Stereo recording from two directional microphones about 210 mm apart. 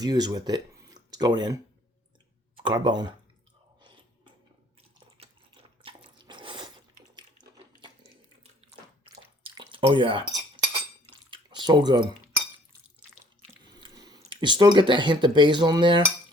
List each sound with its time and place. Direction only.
0.0 s speech: 20° right (ahead or behind)
2.6 s speech: 20° right (ahead or behind)
3.8 s chewing: 20° right (ahead or behind)
6.2 s ratchet: 25° right (ahead or behind)
9.4 s dishes: 25° right (ahead or behind)
11.3 s drip: 20° right (ahead or behind)
13.7 s speech: 20° right (ahead or behind)